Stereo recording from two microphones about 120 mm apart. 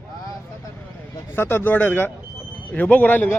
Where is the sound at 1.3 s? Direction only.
20° left (ahead or behind).